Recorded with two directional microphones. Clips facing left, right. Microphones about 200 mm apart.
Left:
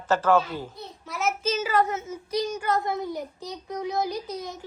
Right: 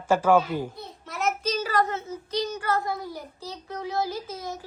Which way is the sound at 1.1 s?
Centre (ahead or behind).